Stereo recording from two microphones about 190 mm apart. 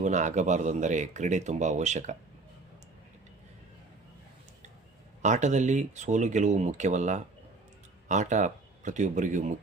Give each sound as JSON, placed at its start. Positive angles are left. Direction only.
{"t": 0.0, "sound": "speech", "side_deg": -40}
{"t": 5.2, "sound": "speech", "side_deg": -40}